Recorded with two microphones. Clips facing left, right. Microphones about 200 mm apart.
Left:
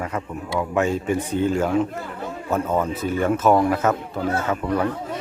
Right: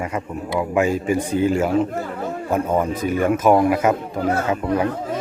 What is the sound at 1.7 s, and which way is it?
Speech, 35° right (ahead or behind).